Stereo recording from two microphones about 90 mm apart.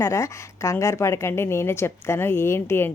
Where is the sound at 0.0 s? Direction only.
35° left (ahead or behind).